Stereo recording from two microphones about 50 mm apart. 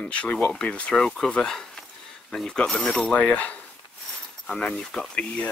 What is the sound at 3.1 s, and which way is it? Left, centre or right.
Speech, left.